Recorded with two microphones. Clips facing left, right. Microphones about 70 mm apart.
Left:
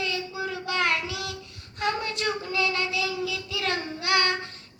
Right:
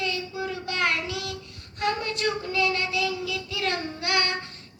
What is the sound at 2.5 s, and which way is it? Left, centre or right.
Child singing, right.